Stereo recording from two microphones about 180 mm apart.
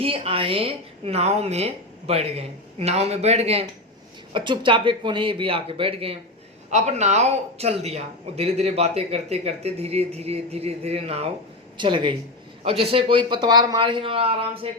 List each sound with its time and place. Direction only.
0.0 s speech: 30° right (ahead or behind)